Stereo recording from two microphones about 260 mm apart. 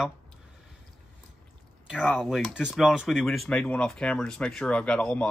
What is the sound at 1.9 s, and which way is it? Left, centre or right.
Speech, centre.